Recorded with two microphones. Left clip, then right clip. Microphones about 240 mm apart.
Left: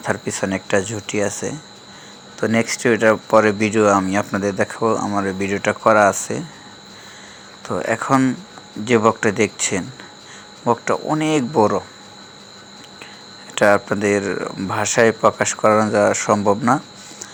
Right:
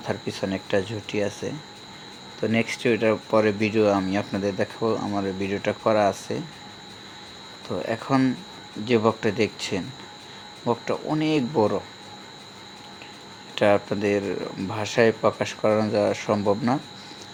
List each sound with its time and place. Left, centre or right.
0.0 s speech: centre
7.7 s speech: centre
13.6 s speech: centre